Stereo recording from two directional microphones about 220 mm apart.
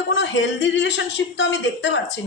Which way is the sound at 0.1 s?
55° left (ahead or behind).